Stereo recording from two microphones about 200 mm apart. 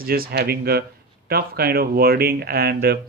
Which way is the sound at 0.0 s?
50° right (ahead or behind).